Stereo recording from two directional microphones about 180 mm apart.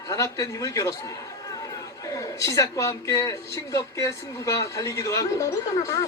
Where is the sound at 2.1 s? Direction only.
20° left (ahead or behind).